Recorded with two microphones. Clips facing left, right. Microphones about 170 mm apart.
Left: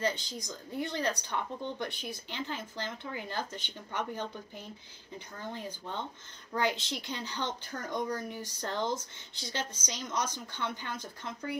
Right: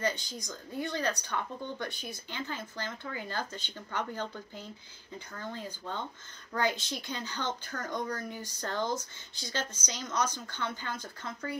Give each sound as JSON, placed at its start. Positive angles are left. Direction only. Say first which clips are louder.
{"t": 0.8, "sound": "speech", "louder": "right 1 dB", "side_deg": 20}
{"t": 8.6, "sound": "speech", "louder": "even", "side_deg": 20}